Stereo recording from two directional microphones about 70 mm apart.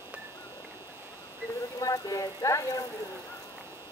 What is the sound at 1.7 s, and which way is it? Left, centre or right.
Speech, left.